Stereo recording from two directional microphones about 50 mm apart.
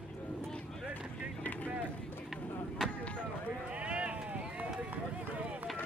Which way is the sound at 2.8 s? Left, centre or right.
Centre.